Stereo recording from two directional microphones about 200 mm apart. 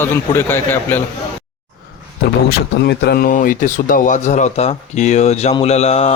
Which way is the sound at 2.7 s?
55° left (ahead or behind).